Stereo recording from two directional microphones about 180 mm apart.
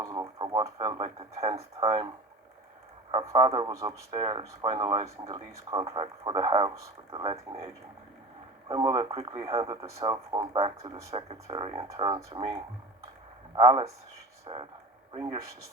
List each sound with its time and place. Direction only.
0.0 s radio: 20° right (ahead or behind)
1.8 s a sound: 30° right (ahead or behind)
3.1 s speech: 25° right (ahead or behind)
8.6 s speech: 20° right (ahead or behind)